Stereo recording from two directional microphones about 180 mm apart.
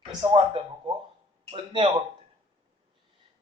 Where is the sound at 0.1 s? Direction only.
25° right (ahead or behind).